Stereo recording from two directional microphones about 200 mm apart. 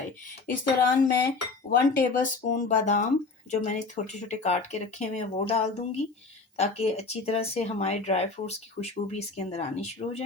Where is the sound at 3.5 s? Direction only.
35° left (ahead or behind).